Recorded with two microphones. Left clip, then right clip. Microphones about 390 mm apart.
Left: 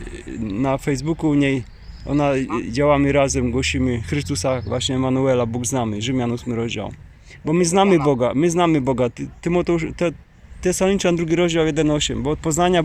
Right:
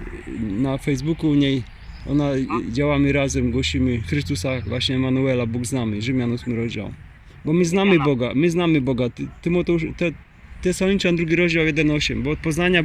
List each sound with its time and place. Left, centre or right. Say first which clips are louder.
0.6 s speech: left 3 dB; left